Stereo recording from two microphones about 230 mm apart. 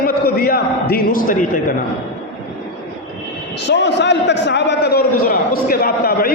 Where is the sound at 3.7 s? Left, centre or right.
Left.